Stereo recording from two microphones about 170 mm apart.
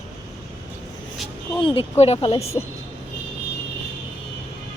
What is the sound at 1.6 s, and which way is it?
Speech, 30° left (ahead or behind).